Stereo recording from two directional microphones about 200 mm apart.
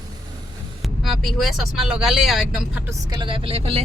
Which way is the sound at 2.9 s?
20° right (ahead or behind).